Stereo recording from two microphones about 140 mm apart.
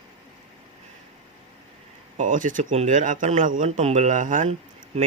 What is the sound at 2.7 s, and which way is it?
Speech, 55° right (ahead or behind).